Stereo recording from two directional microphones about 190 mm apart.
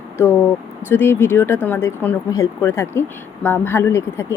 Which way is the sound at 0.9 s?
10° left (ahead or behind).